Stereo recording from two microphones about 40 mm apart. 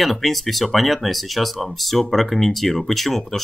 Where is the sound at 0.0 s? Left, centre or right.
Centre.